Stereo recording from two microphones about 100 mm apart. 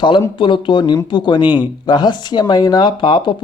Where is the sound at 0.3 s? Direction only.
55° left (ahead or behind).